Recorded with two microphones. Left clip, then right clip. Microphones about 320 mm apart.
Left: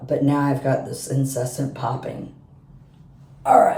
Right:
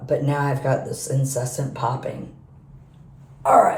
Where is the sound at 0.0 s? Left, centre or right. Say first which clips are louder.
Left 2 dB; centre.